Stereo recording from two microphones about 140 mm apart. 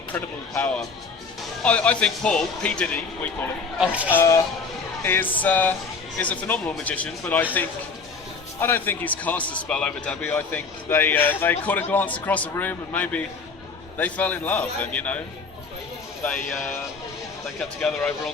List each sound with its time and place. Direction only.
0.1 s a man's voice: 15° left (ahead or behind)
3.8 s speech: 10° right (ahead or behind)
4.1 s a man's voice: 20° left (ahead or behind)
8.5 s a man's voice: 15° left (ahead or behind)
16.2 s a man's voice: 10° left (ahead or behind)